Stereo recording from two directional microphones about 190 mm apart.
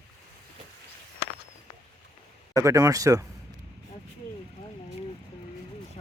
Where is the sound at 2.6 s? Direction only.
15° right (ahead or behind).